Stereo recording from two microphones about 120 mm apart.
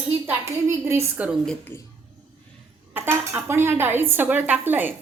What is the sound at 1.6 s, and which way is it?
Speech, 20° left (ahead or behind).